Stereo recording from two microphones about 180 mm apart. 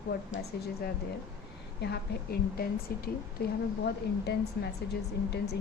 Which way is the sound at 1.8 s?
60° left (ahead or behind).